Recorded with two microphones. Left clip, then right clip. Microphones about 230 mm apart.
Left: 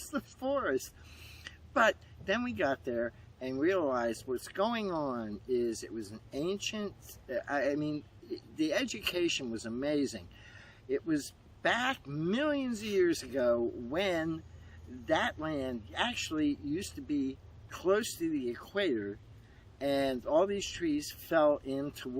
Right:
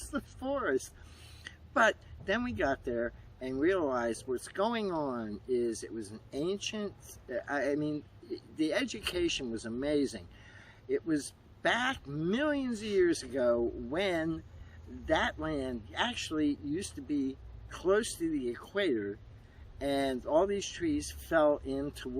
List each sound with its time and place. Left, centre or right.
0.0 s speech: centre